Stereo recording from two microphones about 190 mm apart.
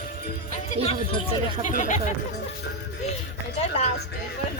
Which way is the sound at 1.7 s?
40° left (ahead or behind).